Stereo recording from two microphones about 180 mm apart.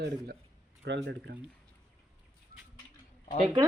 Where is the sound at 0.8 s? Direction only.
75° right (ahead or behind).